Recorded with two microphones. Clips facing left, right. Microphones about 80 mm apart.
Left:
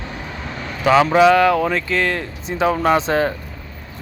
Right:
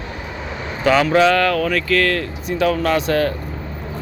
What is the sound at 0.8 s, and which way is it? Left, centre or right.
Speech, centre.